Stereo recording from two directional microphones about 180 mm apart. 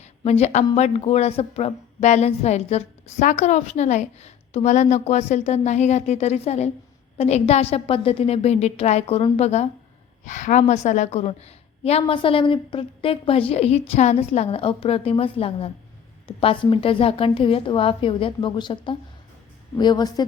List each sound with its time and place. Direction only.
0.0 s a woman's voice: 35° left (ahead or behind); by 20.2 s 20° left (ahead or behind)